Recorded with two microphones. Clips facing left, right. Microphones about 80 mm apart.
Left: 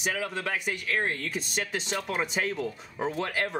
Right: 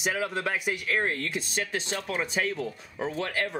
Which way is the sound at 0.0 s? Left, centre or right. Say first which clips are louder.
Right 2 dB; centre.